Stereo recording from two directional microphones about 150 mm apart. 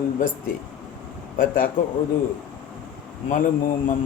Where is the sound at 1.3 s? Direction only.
65° left (ahead or behind).